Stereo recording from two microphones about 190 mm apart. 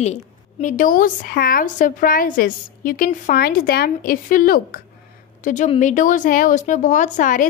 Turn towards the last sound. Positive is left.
turn(degrees=40)  # may be behind; listen again after turning